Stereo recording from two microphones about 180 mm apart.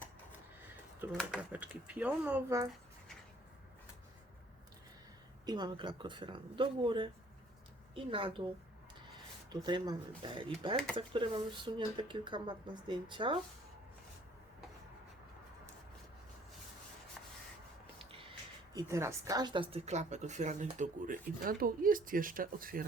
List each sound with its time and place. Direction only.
1.1 s speech: centre (ahead or behind)
5.5 s speech: 25° right (ahead or behind)
9.5 s speech: 25° right (ahead or behind)
18.7 s speech: 20° right (ahead or behind); by 22.9 s 50° right (ahead or behind)